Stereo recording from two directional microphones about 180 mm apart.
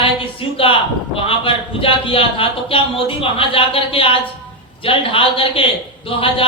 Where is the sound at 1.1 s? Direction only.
30° left (ahead or behind).